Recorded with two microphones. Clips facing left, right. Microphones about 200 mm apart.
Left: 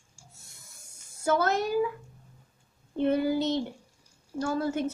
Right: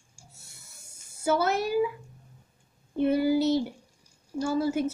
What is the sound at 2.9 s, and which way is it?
A woman's voice, 5° right (ahead or behind).